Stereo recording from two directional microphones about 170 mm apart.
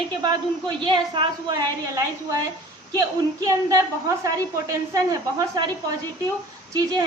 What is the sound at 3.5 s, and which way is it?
A woman's voice, 20° right (ahead or behind).